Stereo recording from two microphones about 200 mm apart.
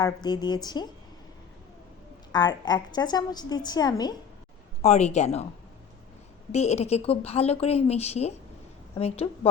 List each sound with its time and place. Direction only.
0.0 s a woman's voice: 20° left (ahead or behind)
2.3 s a woman's voice: 20° left (ahead or behind)
4.8 s a woman's voice: 35° left (ahead or behind)
6.5 s a woman's voice: 35° left (ahead or behind)